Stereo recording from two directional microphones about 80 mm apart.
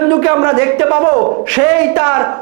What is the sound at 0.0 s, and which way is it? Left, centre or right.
Speech, right.